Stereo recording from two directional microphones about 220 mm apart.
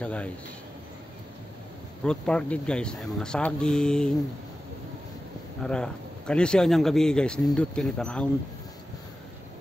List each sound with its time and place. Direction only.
0.0 s speech: 5° left (ahead or behind)
2.0 s speech: 5° left (ahead or behind)
5.6 s speech: 5° left (ahead or behind)